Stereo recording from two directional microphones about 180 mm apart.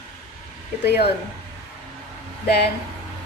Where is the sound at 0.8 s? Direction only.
65° left (ahead or behind).